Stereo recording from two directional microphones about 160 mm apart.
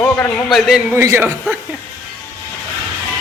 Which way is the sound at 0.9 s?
15° right (ahead or behind).